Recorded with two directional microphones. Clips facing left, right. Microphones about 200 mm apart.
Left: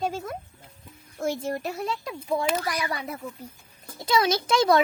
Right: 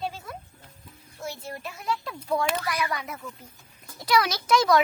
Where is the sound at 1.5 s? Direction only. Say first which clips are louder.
Left 4 dB; 45° left (ahead or behind).